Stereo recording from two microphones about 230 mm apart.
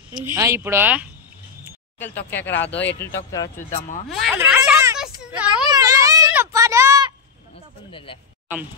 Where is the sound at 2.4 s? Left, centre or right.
Left.